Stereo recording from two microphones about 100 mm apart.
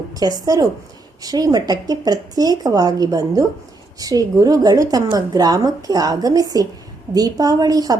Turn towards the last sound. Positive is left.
turn(degrees=-40)  # may be behind; listen again after turning